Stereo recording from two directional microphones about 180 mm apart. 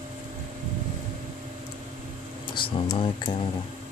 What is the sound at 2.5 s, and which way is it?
Speech, 30° left (ahead or behind).